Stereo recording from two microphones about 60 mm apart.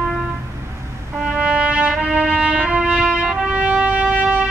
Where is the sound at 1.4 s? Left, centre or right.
Centre.